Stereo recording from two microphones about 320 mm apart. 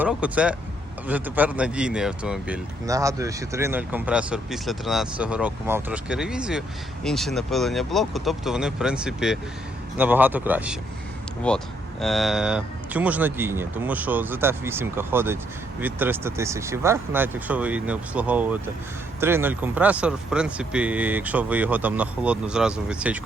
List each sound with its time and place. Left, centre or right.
0.0 s speech: centre